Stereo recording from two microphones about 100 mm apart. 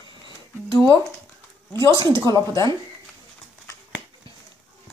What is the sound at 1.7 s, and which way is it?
Speech, 30° left (ahead or behind).